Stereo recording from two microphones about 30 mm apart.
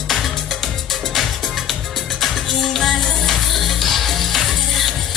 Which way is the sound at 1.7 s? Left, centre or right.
Centre.